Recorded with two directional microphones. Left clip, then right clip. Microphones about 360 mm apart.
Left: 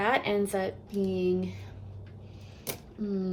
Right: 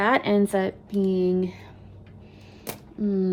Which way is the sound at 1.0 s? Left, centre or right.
Right.